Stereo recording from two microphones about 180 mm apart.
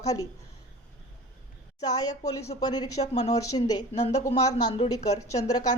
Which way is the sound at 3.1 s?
40° left (ahead or behind).